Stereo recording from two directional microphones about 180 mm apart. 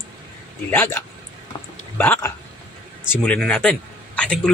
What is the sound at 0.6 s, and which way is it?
A man's voice, 15° left (ahead or behind).